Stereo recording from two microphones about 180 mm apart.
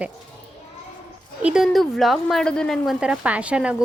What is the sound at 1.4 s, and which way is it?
Speech, 5° right (ahead or behind).